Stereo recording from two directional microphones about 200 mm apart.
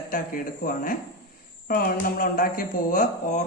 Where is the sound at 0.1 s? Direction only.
45° left (ahead or behind).